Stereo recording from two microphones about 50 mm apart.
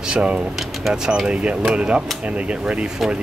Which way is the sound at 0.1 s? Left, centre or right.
Right.